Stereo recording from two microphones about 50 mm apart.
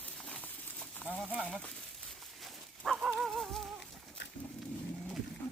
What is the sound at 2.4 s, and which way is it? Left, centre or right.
Dog, centre.